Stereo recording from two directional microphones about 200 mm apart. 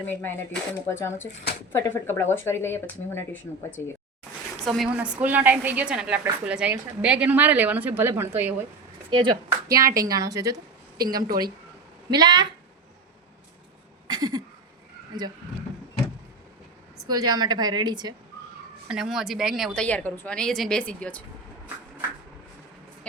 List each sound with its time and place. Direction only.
0.1 s speech: 10° left (ahead or behind)
1.2 s speech: 65° left (ahead or behind)
1.7 s speech: 10° left (ahead or behind)
4.6 s a woman's voice: centre (ahead or behind)
9.0 s speech: 25° right (ahead or behind)
9.5 s a sound: 15° right (ahead or behind)
10.1 s a woman's voice: 15° right (ahead or behind)
10.9 s a woman's voice: 50° right (ahead or behind)
12.1 s a woman's voice: 20° right (ahead or behind)
14.1 s a sound: 20° right (ahead or behind)
17.1 s a woman's voice: 20° right (ahead or behind)
18.9 s a woman's voice: centre (ahead or behind)